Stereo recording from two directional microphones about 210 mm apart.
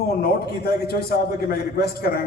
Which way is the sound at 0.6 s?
45° left (ahead or behind).